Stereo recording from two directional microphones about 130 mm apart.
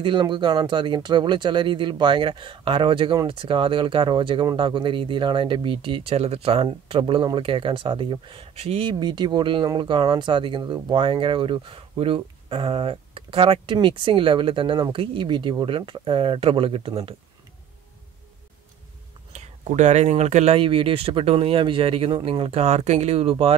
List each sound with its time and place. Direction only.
0.0 s speech: 35° right (ahead or behind)
19.3 s speech: 60° right (ahead or behind)
20.5 s speech: 45° right (ahead or behind)